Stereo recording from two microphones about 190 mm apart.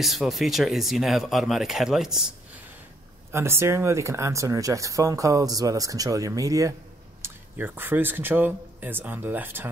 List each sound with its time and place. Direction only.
0.0 s speech: centre (ahead or behind)
3.3 s speech: 15° right (ahead or behind)